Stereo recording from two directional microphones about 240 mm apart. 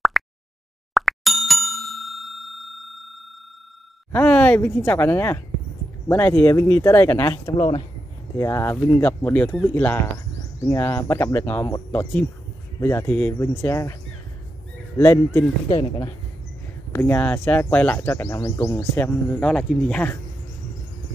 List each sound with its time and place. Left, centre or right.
0.2 s a sound: centre
0.9 s bicycle bell: centre
4.1 s speech: centre
15.0 s speech: centre